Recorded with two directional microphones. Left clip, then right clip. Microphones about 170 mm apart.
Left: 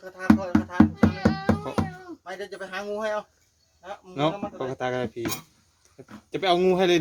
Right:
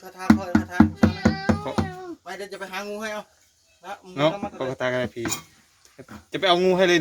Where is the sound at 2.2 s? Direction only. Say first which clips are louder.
Left 2 dB; 35° right (ahead or behind).